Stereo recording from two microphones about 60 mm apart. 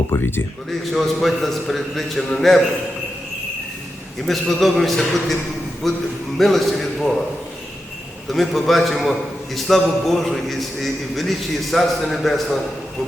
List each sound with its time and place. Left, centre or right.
0.1 s speech: left
0.7 s a man's voice: centre
4.3 s a man's voice: centre
8.3 s a man's voice: centre